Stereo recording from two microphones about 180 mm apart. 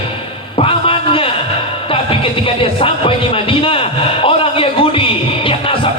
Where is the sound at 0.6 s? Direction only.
30° left (ahead or behind).